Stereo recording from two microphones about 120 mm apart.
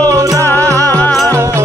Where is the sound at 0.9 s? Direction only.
15° left (ahead or behind).